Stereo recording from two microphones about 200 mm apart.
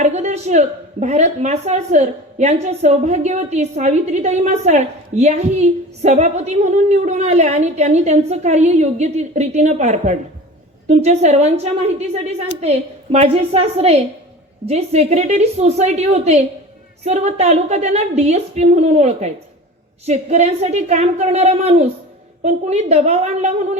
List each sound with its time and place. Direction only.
0.0 s speech: 35° right (ahead or behind)